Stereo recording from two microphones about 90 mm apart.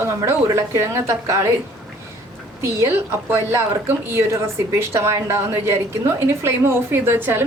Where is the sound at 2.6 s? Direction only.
30° right (ahead or behind).